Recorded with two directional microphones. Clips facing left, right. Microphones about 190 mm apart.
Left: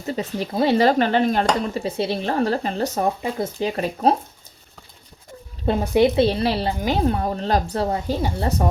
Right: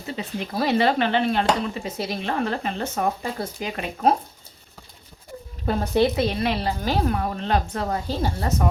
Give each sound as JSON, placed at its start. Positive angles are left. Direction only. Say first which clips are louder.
{"t": 0.1, "sound": "speech", "louder": "left 5 dB", "side_deg": 40}
{"t": 0.5, "sound": "speech", "louder": "left 4 dB", "side_deg": 25}
{"t": 0.8, "sound": "speech", "louder": "left 2 dB", "side_deg": 40}
{"t": 5.6, "sound": "a woman's voice", "louder": "left 3 dB", "side_deg": 15}
{"t": 6.1, "sound": "speech", "louder": "left 4 dB", "side_deg": 30}